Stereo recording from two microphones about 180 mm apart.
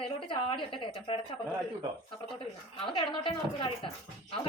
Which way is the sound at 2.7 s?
25° left (ahead or behind).